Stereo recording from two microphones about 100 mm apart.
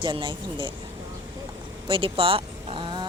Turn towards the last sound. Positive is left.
turn(degrees=-60)  # may be behind; listen again after turning